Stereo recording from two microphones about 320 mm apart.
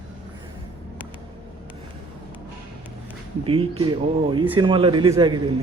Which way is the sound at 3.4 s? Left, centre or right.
Centre.